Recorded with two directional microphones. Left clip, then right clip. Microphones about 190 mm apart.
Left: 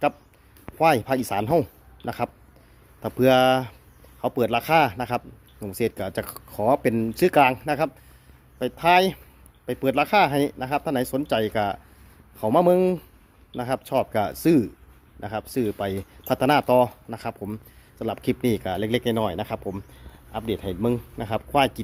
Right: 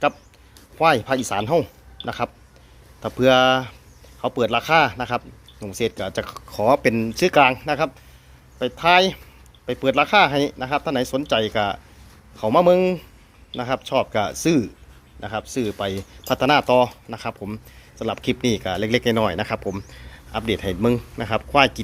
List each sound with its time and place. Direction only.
0.8 s a man's voice: 30° left (ahead or behind)